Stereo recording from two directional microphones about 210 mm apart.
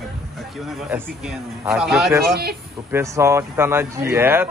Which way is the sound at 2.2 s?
45° right (ahead or behind).